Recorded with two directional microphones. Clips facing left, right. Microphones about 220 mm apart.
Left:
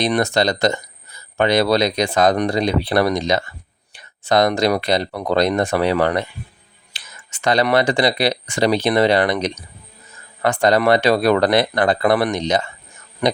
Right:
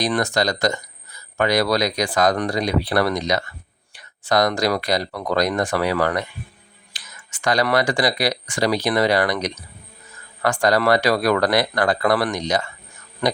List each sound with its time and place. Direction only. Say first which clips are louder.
0.0 s speech: left 3 dB; 25° left (ahead or behind)